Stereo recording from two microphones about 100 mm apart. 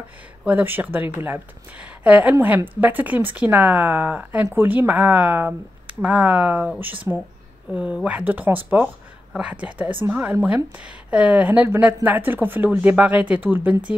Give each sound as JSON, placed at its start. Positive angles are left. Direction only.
{"t": 0.5, "sound": "a woman's voice", "side_deg": -15}